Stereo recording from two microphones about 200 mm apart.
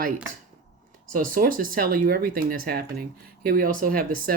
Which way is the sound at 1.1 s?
45° right (ahead or behind).